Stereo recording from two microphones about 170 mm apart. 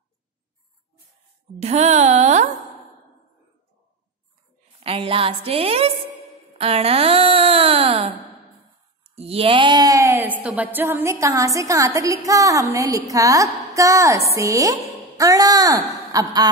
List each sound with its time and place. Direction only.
1.6 s speech: 40° right (ahead or behind)
4.7 s speech: 35° right (ahead or behind)
9.1 s speech: 35° right (ahead or behind)